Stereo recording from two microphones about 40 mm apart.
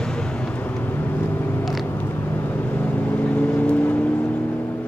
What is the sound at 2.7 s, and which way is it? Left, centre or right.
Vehicle, left.